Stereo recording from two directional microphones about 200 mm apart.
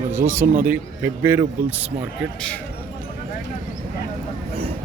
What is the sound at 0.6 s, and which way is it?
A man's voice, 10° right (ahead or behind).